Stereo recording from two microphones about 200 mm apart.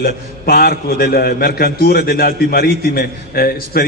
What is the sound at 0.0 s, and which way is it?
A man's voice, 50° left (ahead or behind).